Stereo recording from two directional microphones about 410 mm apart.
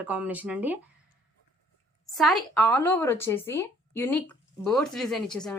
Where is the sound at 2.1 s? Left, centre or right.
Centre.